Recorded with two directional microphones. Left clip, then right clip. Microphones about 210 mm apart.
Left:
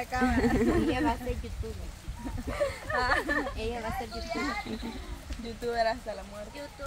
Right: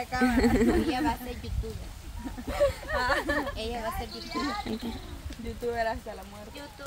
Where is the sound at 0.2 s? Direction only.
15° right (ahead or behind).